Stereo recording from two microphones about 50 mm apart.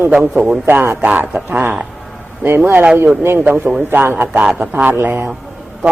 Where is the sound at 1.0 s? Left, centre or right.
Right.